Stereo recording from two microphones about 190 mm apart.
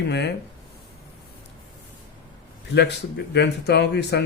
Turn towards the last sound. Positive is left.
turn(degrees=60)  # may be behind; listen again after turning